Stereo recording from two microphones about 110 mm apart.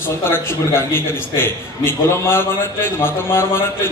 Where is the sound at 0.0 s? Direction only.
20° left (ahead or behind).